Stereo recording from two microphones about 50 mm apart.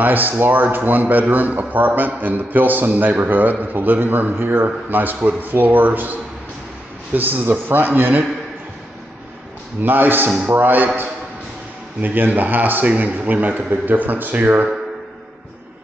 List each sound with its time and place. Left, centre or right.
0.0 s a man's voice: right
7.2 s a man's voice: right
9.8 s a man's voice: right
12.0 s a man's voice: right